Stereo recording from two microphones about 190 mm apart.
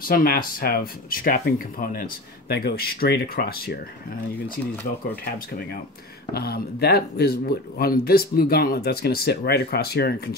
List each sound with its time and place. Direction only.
0.0 s speech: 50° left (ahead or behind)
6.3 s speech: 55° left (ahead or behind)